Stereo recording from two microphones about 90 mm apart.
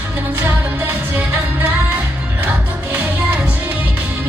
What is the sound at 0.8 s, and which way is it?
Music, 15° right (ahead or behind).